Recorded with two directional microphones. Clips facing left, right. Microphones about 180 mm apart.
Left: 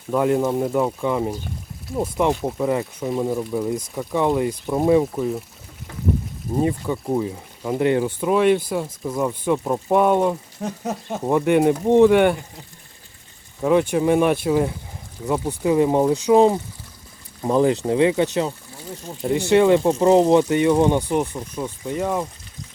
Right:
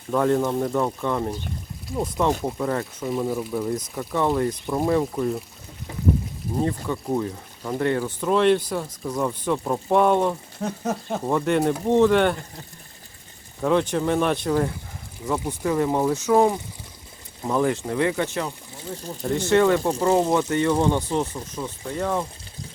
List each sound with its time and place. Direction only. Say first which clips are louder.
0.1 s speech: left 2 dB; 10° left (ahead or behind)
6.6 s speech: left 3 dB; 10° left (ahead or behind)
13.6 s speech: left 3 dB; 10° left (ahead or behind)